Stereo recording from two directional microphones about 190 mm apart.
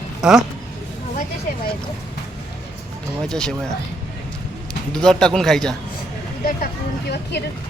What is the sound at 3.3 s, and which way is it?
Speech, 5° left (ahead or behind).